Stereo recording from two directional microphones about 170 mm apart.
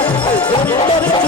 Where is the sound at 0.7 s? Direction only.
25° left (ahead or behind).